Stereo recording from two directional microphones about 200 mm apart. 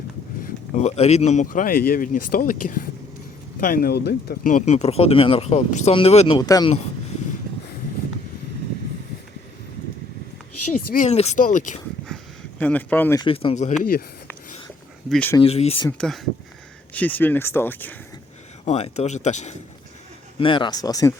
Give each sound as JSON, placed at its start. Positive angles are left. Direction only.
{"t": 0.4, "sound": "speech", "side_deg": 35}
{"t": 10.7, "sound": "speech", "side_deg": 40}
{"t": 12.0, "sound": "a sound", "side_deg": 5}
{"t": 13.2, "sound": "speech", "side_deg": 25}
{"t": 15.1, "sound": "speech", "side_deg": 10}
{"t": 15.4, "sound": "speech", "side_deg": 30}
{"t": 15.9, "sound": "speech", "side_deg": 5}
{"t": 18.6, "sound": "speech", "side_deg": 30}
{"t": 20.4, "sound": "speech", "side_deg": 25}